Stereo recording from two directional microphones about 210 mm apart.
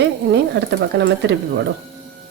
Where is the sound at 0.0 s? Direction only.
55° right (ahead or behind).